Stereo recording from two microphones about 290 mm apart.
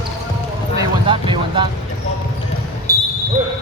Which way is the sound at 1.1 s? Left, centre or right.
Centre.